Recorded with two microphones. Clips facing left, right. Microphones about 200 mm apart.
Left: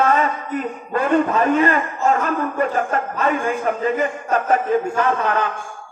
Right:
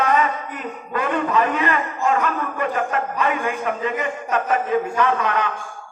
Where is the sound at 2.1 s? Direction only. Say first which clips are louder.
Left 1 dB; 40° left (ahead or behind).